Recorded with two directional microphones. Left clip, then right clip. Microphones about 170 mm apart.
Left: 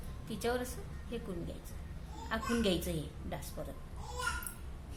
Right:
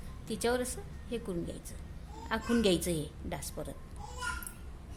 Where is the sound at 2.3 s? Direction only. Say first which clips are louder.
Right 4 dB; 55° right (ahead or behind).